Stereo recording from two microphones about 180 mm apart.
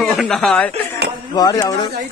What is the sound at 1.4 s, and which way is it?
Speech, 20° left (ahead or behind).